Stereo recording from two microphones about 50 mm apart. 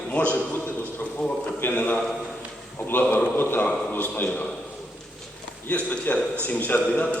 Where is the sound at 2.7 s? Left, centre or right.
Left.